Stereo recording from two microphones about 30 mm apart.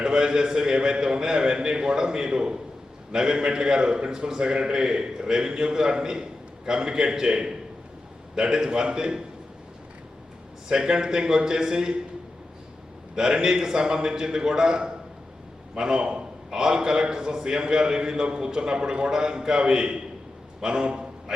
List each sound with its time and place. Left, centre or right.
0.0 s a man's voice: right
10.7 s a man's voice: right
13.1 s a man's voice: right
19.1 s a man's voice: right
20.6 s a sound: right